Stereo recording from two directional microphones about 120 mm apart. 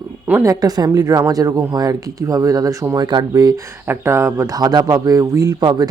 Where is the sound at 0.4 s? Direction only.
30° right (ahead or behind).